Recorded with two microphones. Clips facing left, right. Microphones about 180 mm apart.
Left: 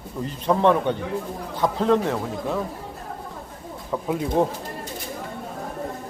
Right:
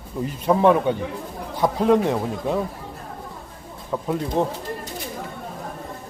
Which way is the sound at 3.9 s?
5° left (ahead or behind).